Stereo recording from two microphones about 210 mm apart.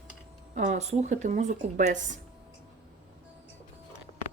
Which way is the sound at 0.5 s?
35° right (ahead or behind).